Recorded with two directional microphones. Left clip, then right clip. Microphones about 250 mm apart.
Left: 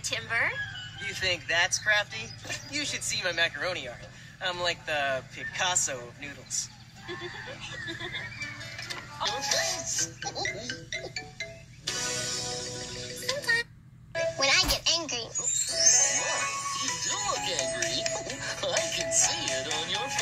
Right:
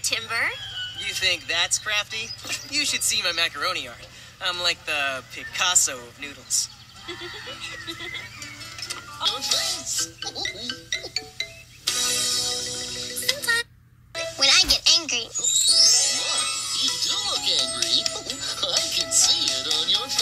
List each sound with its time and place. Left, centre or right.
0.0 s speech: right
9.2 s speech: right
10.9 s music: right
15.8 s music: right
17.1 s speech: right